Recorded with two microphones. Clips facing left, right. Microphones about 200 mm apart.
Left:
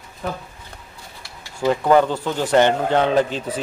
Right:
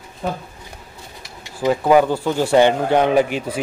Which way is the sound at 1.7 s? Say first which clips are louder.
Right 2 dB; 10° right (ahead or behind).